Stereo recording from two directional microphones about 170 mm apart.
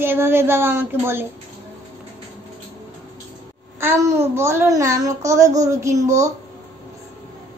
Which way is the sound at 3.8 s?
15° right (ahead or behind).